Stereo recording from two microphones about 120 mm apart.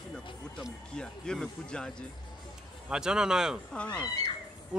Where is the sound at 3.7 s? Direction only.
10° left (ahead or behind).